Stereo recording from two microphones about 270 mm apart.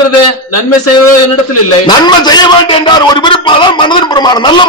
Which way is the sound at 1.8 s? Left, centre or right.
Centre.